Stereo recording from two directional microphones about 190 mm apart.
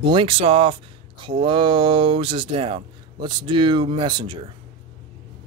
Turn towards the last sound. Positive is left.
turn(degrees=-25)  # may be behind; listen again after turning